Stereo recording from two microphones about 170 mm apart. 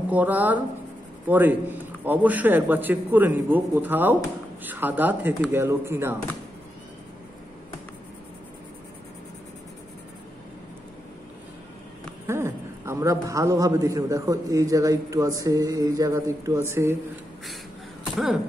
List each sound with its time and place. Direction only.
0.1 s a man's voice: 10° right (ahead or behind)
12.3 s a man's voice: 15° right (ahead or behind)
18.1 s speech: centre (ahead or behind)